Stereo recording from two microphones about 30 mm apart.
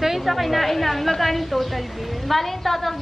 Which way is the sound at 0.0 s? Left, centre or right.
Centre.